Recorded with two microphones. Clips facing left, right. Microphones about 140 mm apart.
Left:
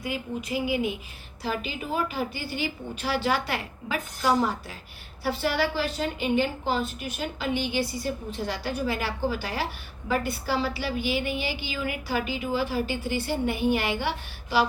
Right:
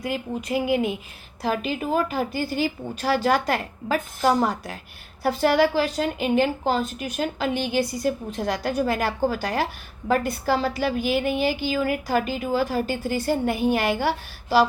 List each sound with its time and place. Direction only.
0.0 s a woman's voice: 45° right (ahead or behind)